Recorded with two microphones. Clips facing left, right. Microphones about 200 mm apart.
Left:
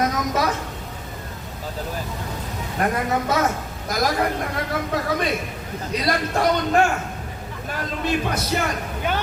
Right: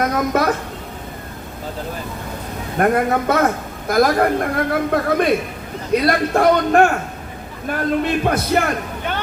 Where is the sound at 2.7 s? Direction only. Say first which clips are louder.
Right 6 dB; 55° right (ahead or behind).